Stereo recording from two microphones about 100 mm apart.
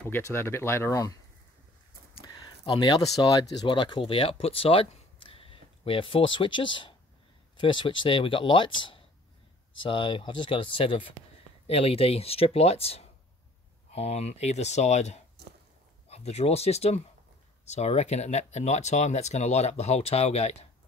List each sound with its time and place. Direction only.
0.2 s speech: 25° left (ahead or behind)
2.2 s speech: 50° left (ahead or behind); by 11.1 s 65° left (ahead or behind)
11.6 s speech: 80° left
16.1 s speech: 90° left